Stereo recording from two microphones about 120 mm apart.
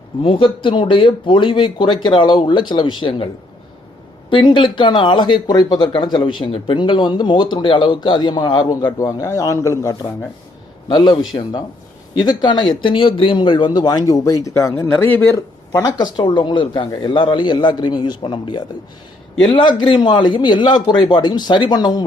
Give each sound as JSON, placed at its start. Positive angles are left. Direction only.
{"t": 0.2, "sound": "speech", "side_deg": 45}
{"t": 4.3, "sound": "speech", "side_deg": 40}
{"t": 10.8, "sound": "speech", "side_deg": 40}